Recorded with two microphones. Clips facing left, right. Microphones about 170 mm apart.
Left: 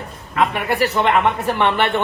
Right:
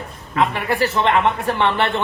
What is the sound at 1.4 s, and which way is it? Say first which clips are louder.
Speech: left 1 dB; centre (ahead or behind).